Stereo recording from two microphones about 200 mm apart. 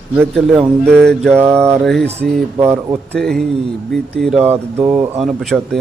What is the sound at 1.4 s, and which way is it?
Speech, 10° right (ahead or behind).